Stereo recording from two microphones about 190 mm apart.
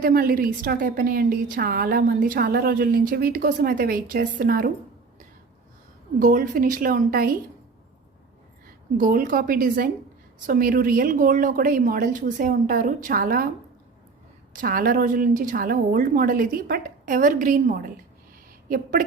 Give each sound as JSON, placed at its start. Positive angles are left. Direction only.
{"t": 0.0, "sound": "a woman's voice", "side_deg": -50}
{"t": 6.1, "sound": "a woman's voice", "side_deg": -45}
{"t": 9.0, "sound": "a woman's voice", "side_deg": -50}
{"t": 14.5, "sound": "a woman's voice", "side_deg": -45}